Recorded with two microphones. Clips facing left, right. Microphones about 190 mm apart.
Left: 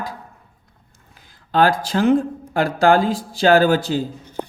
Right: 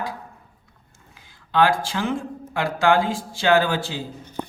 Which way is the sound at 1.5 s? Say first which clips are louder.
Left 3 dB; 40° left (ahead or behind).